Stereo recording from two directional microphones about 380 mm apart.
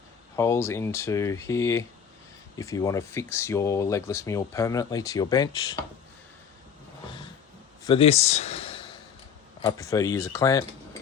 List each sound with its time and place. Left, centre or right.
0.3 s speech: centre
7.9 s speech: centre